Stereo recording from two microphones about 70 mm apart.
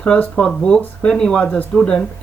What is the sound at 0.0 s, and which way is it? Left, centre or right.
Speech, centre.